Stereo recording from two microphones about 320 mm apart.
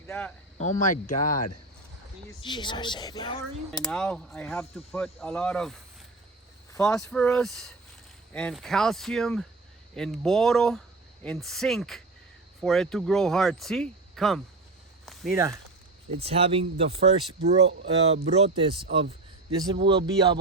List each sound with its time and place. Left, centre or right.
0.1 s speech: centre
0.6 s speech: left
2.4 s speech: centre
3.7 s speech: centre
6.7 s speech: centre
15.0 s a sound: centre
16.1 s speech: centre